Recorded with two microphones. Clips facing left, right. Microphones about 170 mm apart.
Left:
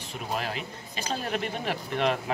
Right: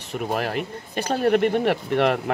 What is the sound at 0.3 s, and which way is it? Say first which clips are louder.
Speech: right 6 dB; 55° right (ahead or behind).